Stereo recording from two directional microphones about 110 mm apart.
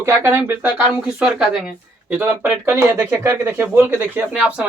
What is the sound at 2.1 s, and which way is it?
Speech, 15° right (ahead or behind).